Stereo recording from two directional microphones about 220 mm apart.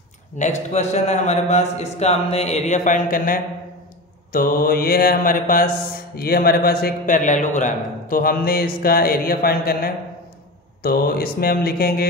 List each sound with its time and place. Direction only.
0.4 s speech: 30° left (ahead or behind)
4.3 s mantra: 40° left (ahead or behind)